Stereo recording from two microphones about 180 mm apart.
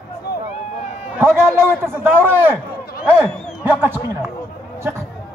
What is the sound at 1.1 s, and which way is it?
A man's voice, 15° right (ahead or behind).